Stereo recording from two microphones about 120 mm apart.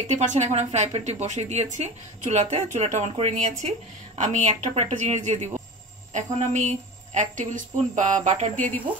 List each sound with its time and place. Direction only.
0.1 s speech: 75° right (ahead or behind); by 3.5 s 60° right (ahead or behind)
4.2 s a woman's voice: 80° right
4.6 s speech: 75° right (ahead or behind); by 8.7 s 90° right